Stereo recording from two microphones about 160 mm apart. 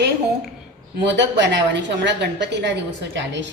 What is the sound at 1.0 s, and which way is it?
A woman's voice, 90° right.